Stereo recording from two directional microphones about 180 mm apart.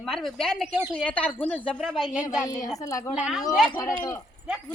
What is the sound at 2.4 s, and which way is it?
Speech, 20° left (ahead or behind).